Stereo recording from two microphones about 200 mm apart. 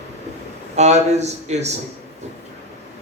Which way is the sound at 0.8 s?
35° right (ahead or behind).